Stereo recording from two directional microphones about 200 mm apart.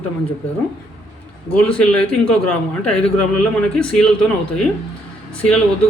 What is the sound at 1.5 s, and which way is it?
A man's voice, 5° left (ahead or behind).